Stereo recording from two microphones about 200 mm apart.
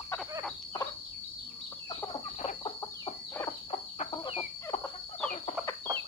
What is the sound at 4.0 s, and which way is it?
Chicken, 25° left (ahead or behind).